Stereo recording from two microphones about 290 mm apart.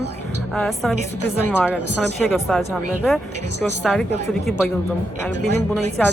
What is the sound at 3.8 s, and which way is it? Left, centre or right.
Speech, centre.